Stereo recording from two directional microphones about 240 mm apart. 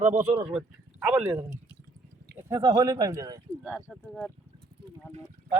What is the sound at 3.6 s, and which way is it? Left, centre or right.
Speech, centre.